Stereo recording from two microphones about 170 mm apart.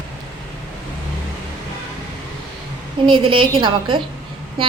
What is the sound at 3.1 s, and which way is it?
Speech, 30° right (ahead or behind).